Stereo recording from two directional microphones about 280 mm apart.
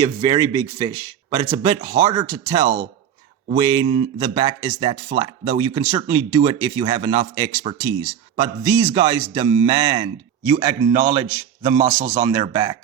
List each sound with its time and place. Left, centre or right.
0.2 s speech: centre